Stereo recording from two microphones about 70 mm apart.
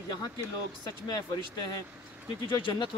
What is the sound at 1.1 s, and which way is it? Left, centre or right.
Speech, left.